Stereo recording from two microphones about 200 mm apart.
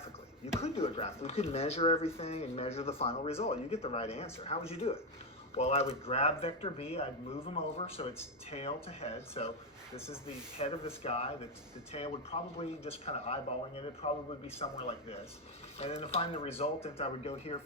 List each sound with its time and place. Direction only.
0.0 s speech: 30° left (ahead or behind)